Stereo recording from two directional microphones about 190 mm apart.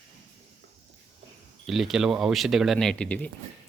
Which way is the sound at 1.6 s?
Centre (ahead or behind).